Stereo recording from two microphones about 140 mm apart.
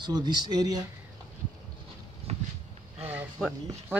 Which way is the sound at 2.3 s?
50° right (ahead or behind).